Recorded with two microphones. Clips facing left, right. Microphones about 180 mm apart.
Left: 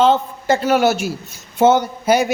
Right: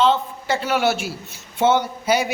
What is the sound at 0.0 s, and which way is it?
A woman's voice, 45° left (ahead or behind).